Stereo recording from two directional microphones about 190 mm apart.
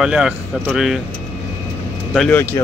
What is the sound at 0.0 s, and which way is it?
Speech, 5° right (ahead or behind).